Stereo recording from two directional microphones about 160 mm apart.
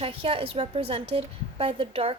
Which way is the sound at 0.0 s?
35° right (ahead or behind).